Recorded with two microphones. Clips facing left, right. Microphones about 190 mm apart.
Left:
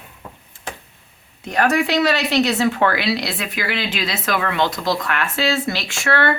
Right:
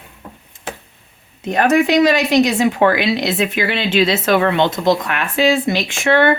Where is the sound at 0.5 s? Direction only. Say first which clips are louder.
Right 4 dB; 20° right (ahead or behind).